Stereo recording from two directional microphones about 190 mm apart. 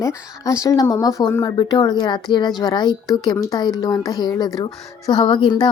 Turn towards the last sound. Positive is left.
turn(degrees=25)  # may be behind; listen again after turning